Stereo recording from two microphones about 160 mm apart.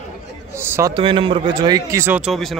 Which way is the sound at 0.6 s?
20° right (ahead or behind).